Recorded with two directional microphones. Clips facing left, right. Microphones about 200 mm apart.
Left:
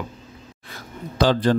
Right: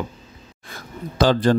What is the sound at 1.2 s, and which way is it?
Speech, 45° right (ahead or behind).